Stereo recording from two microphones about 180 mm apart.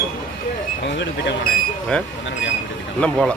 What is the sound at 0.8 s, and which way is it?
Speech, 75° left (ahead or behind).